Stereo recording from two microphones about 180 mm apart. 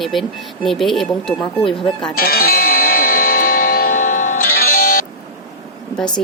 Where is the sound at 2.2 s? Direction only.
55° left (ahead or behind).